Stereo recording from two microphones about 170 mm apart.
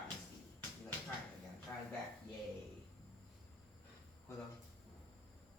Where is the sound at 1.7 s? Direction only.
15° left (ahead or behind).